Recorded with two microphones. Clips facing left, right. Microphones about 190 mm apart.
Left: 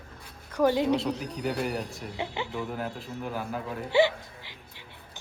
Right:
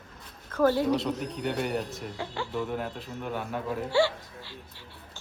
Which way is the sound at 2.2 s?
20° left (ahead or behind).